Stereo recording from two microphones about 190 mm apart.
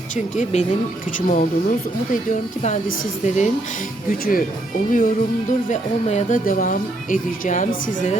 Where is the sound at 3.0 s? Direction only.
40° left (ahead or behind).